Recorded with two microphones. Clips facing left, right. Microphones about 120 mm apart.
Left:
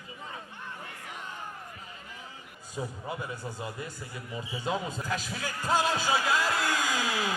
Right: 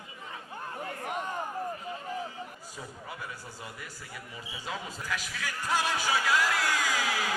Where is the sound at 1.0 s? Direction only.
55° right (ahead or behind).